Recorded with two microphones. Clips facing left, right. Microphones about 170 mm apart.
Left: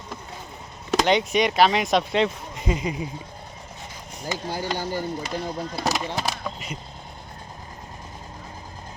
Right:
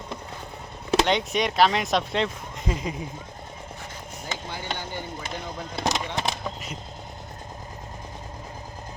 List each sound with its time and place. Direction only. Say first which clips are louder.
1.0 s speech: left 4 dB; centre (ahead or behind)
4.4 s speech: left 8 dB; 40° left (ahead or behind)
5.7 s speech: even; 5° left (ahead or behind)
6.1 s a sound: even; centre (ahead or behind)